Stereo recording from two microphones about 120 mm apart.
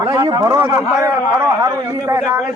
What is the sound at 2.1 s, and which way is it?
Speech, 25° right (ahead or behind).